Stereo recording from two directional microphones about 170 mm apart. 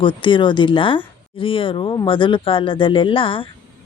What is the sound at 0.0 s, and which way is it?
A woman's voice, 30° left (ahead or behind).